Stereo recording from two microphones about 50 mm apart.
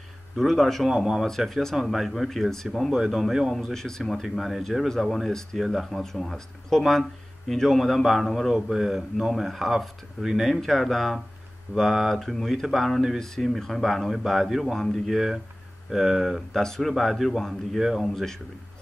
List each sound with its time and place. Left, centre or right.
0.4 s a man's voice: centre
3.5 s a man's voice: centre
16.5 s a man's voice: centre